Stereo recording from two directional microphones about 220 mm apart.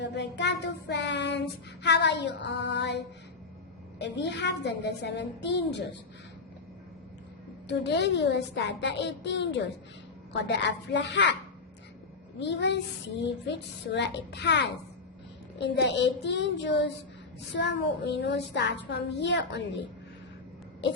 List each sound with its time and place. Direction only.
0.0 s child singing: 50° left (ahead or behind)
7.7 s child singing: 50° left (ahead or behind)
12.4 s child singing: 50° left (ahead or behind)
13.9 s child singing: 50° left (ahead or behind)